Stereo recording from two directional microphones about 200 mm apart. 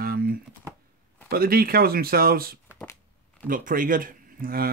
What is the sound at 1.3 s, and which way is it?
Speech, 50° right (ahead or behind).